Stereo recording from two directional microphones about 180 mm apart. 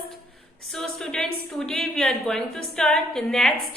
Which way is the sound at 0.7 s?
Centre (ahead or behind).